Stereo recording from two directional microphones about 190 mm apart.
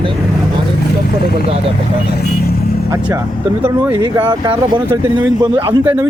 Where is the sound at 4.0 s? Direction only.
20° right (ahead or behind).